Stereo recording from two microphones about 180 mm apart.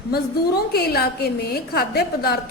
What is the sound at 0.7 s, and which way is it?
A woman's voice, 60° left (ahead or behind).